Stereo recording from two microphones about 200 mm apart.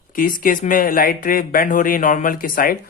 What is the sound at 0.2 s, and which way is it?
Speech, 45° left (ahead or behind).